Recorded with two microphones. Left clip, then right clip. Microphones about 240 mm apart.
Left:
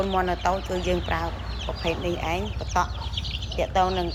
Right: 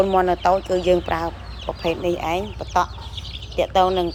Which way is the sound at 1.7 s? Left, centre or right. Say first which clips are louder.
Right 6 dB; right.